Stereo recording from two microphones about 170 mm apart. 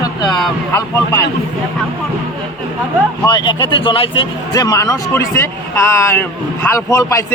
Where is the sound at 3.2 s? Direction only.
25° left (ahead or behind).